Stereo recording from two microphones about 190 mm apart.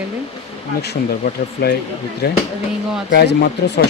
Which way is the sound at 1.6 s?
60° left (ahead or behind).